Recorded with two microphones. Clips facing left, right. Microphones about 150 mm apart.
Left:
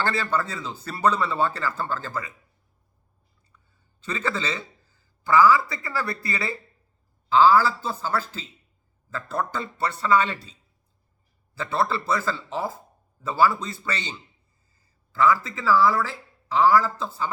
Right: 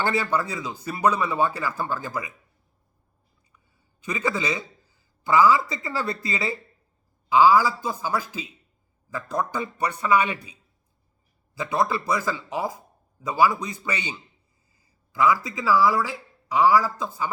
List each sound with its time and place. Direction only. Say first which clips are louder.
0.0 s speech: right 1 dB; 15° right (ahead or behind)
4.0 s a man's voice: right 2 dB; 15° right (ahead or behind)